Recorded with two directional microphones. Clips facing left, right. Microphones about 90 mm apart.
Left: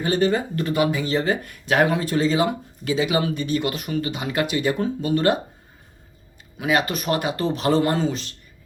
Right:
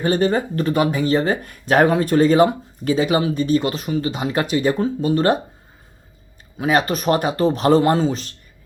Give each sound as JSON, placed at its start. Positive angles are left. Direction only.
{"t": 0.0, "sound": "speech", "side_deg": -40}
{"t": 6.6, "sound": "speech", "side_deg": -40}